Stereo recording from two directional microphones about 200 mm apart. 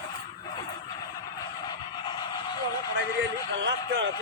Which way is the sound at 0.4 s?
25° left (ahead or behind).